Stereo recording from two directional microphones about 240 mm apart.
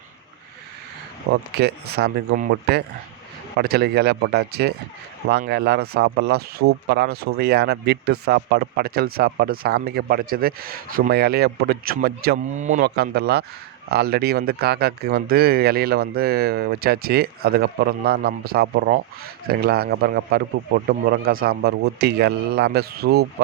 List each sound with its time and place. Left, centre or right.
1.3 s speech: right